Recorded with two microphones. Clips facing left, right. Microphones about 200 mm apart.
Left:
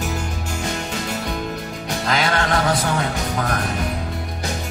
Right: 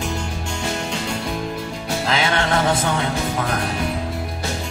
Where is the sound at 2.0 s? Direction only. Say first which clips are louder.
Even; 25° right (ahead or behind).